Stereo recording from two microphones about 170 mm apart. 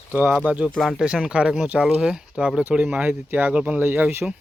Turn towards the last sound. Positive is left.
turn(degrees=-10)  # may be behind; listen again after turning